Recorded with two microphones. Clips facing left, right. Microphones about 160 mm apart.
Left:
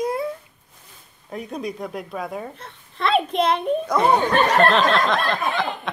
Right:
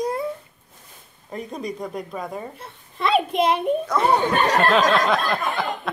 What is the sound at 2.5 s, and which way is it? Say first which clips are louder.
A child's voice: right 1 dB; 10° right (ahead or behind).